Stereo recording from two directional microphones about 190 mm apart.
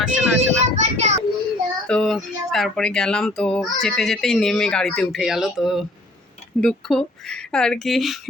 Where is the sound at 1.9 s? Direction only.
5° left (ahead or behind).